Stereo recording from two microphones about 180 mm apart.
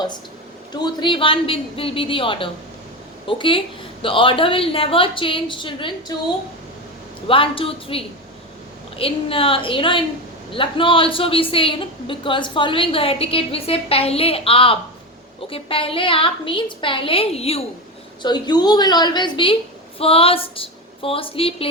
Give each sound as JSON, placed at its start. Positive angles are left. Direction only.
{"t": 0.7, "sound": "a woman's voice", "side_deg": 25}
{"t": 7.3, "sound": "a woman's voice", "side_deg": 30}